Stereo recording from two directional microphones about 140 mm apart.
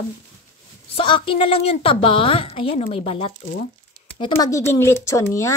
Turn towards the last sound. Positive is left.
turn(degrees=20)  # may be behind; listen again after turning